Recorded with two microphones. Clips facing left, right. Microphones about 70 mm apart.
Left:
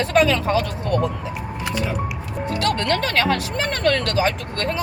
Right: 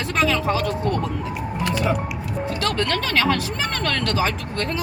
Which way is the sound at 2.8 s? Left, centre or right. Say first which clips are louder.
Left 1 dB; centre.